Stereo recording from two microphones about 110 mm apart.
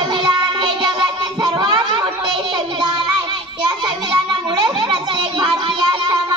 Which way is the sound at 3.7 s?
45° right (ahead or behind).